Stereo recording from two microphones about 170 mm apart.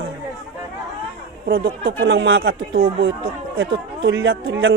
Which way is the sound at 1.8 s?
60° right (ahead or behind).